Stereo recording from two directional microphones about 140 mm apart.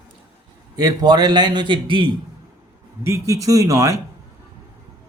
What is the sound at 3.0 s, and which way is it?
Speech, 20° right (ahead or behind).